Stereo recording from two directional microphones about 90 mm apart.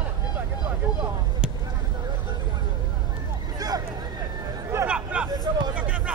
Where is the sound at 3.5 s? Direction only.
45° right (ahead or behind).